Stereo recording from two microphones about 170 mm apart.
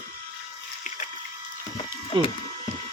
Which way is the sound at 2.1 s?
30° right (ahead or behind).